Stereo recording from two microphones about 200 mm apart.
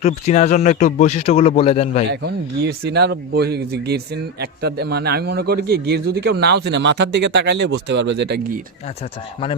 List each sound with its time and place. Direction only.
0.0 s speech: 35° left (ahead or behind)
2.0 s speech: 55° right (ahead or behind)